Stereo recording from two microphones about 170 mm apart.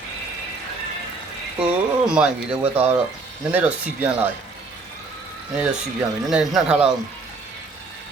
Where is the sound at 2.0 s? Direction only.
5° right (ahead or behind).